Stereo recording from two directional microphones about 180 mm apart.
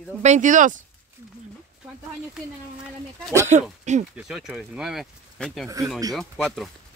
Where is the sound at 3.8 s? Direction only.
40° right (ahead or behind).